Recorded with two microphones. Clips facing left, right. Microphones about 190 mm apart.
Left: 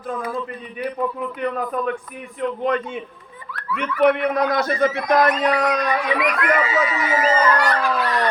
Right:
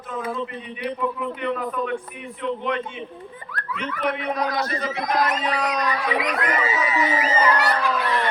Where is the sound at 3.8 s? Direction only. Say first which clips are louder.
Left 9 dB; 55° left (ahead or behind).